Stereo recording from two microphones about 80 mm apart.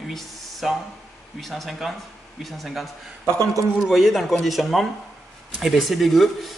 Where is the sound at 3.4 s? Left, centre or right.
Right.